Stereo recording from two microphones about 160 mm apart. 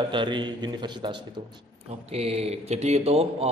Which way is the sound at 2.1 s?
40° right (ahead or behind).